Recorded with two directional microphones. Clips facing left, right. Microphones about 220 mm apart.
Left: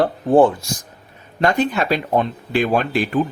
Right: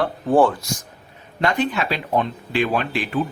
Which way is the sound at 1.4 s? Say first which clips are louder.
Left 3 dB; 45° left (ahead or behind).